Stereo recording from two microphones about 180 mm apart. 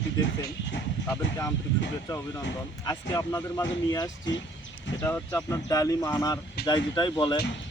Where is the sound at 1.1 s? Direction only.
15° left (ahead or behind).